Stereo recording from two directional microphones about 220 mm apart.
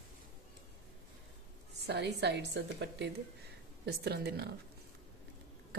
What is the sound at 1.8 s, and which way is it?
A woman's voice, 50° right (ahead or behind).